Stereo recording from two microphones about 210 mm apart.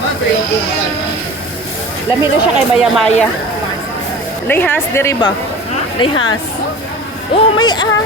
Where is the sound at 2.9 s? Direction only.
Centre (ahead or behind).